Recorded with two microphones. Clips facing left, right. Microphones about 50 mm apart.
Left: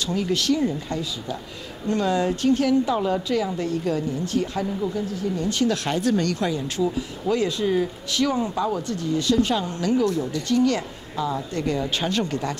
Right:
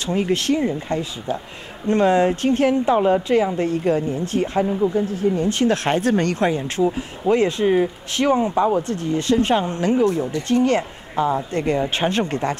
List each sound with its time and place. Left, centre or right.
0.0 s speech: right